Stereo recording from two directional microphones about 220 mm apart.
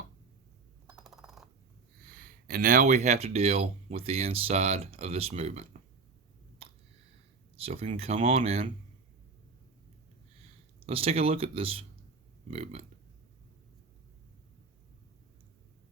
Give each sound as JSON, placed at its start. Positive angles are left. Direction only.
{"t": 0.9, "sound": "coin", "side_deg": -5}
{"t": 2.0, "sound": "speech", "side_deg": -40}
{"t": 7.5, "sound": "speech", "side_deg": -25}
{"t": 10.8, "sound": "speech", "side_deg": -25}